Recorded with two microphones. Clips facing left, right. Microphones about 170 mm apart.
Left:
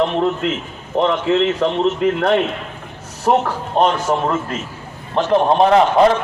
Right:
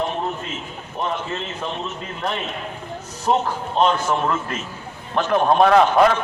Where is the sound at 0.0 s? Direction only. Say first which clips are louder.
Left 8 dB; 80° left.